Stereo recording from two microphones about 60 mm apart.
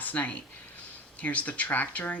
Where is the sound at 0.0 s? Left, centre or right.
Left.